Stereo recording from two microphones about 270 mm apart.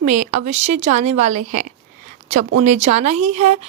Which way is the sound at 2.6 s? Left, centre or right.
Right.